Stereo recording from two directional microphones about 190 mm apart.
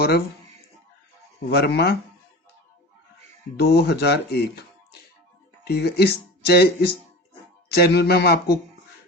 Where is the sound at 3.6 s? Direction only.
55° left (ahead or behind).